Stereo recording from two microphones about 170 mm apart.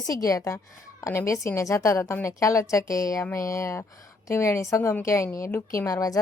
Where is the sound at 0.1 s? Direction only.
20° left (ahead or behind).